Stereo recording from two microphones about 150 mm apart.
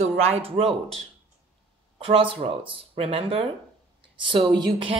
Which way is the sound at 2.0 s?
35° right (ahead or behind).